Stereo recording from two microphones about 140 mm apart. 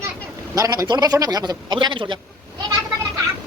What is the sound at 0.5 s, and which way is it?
Speech, 25° right (ahead or behind).